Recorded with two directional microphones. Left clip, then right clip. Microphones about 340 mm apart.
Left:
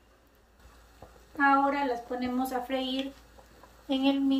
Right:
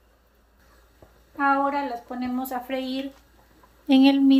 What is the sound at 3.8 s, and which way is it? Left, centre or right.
Speech, right.